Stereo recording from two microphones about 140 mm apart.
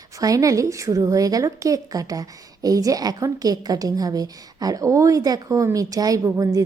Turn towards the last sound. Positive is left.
turn(degrees=-25)  # may be behind; listen again after turning